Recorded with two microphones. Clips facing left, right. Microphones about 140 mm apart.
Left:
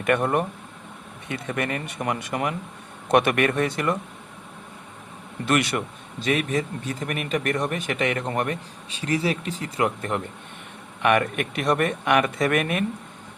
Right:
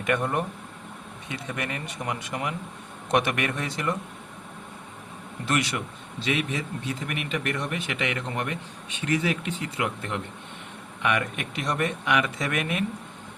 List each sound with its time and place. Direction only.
0.0 s speech: 60° left (ahead or behind)
5.5 s speech: 55° left (ahead or behind); by 10.2 s 40° left (ahead or behind)
11.0 s speech: 55° left (ahead or behind)